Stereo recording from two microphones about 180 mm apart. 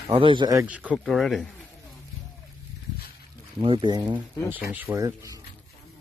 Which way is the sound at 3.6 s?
25° right (ahead or behind).